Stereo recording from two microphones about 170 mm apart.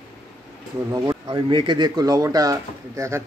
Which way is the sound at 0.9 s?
25° right (ahead or behind).